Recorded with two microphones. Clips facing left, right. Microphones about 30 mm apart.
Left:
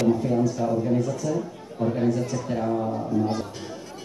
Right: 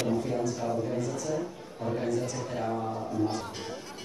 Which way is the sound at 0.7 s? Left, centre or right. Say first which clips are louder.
Left 6 dB; centre.